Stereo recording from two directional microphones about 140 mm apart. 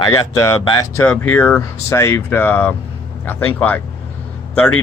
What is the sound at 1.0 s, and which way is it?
Speech, 10° left (ahead or behind).